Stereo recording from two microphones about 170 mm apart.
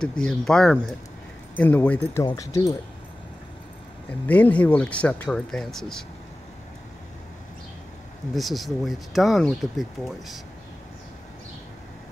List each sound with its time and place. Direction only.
0.0 s speech: 5° left (ahead or behind); by 2.7 s 20° left (ahead or behind)
4.3 s speech: 10° left (ahead or behind)
8.4 s speech: centre (ahead or behind)